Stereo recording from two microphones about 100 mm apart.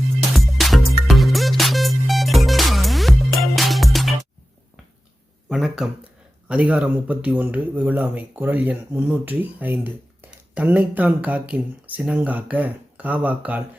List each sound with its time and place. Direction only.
0.3 s music: centre (ahead or behind)
5.5 s a sound: centre (ahead or behind)
6.5 s speech: 15° right (ahead or behind)